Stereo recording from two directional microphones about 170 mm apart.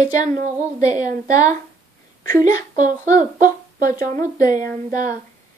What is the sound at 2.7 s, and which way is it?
Speech, 50° right (ahead or behind).